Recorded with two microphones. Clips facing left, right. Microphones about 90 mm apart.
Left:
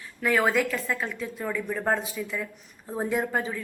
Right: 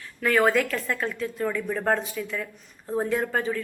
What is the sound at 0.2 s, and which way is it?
A woman's voice, 5° left (ahead or behind).